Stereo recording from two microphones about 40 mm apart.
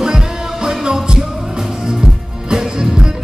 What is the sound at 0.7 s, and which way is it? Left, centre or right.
Music, centre.